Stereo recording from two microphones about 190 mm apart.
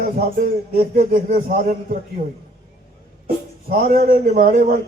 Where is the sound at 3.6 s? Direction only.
50° right (ahead or behind).